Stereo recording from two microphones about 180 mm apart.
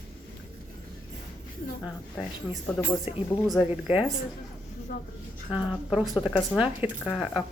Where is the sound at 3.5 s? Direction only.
5° right (ahead or behind).